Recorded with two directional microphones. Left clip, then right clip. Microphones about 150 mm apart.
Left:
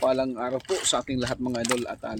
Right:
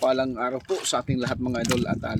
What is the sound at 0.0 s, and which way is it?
Speech, 10° right (ahead or behind).